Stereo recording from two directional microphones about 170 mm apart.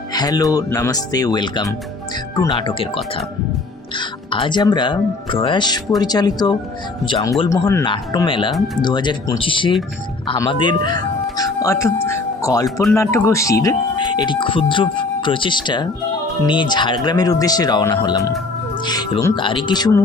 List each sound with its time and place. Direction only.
0.1 s speech: 20° left (ahead or behind)
7.9 s speech: 30° left (ahead or behind)
8.5 s speech: centre (ahead or behind)
8.8 s speech: 25° left (ahead or behind)